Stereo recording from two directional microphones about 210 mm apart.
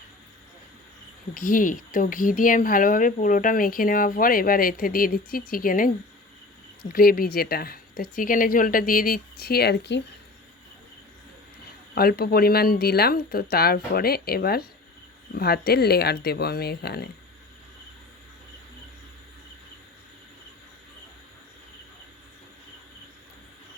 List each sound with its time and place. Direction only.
1.3 s a woman's voice: 40° left (ahead or behind)
11.9 s speech: 45° left (ahead or behind)